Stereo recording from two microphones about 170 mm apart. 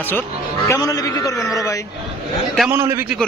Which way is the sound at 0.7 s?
20° left (ahead or behind).